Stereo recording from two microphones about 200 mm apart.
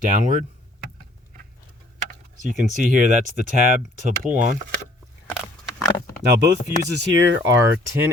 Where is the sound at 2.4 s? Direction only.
40° right (ahead or behind).